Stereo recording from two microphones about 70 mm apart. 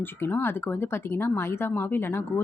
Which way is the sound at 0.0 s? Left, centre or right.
Left.